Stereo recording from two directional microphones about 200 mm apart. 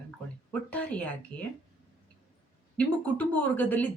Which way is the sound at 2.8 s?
10° left (ahead or behind).